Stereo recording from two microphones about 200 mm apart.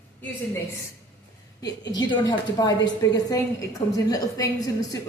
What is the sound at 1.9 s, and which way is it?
A woman's voice, 20° left (ahead or behind).